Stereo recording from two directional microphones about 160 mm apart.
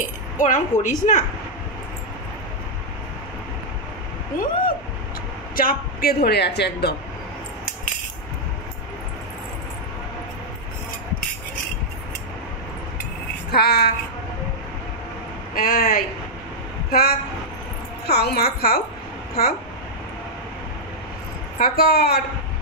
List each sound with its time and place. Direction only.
0.4 s a woman's voice: 55° left (ahead or behind)
4.3 s a man's voice: 60° left (ahead or behind)
5.6 s speech: 70° left (ahead or behind); by 7.0 s 90° left
13.5 s a sound: 80° left
15.5 s a man's voice: 65° left (ahead or behind)
18.0 s a woman's voice: 80° left
21.5 s a woman's voice: 70° left (ahead or behind)